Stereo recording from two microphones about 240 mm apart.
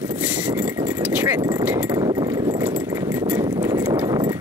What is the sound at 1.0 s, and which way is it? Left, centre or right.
Speech, centre.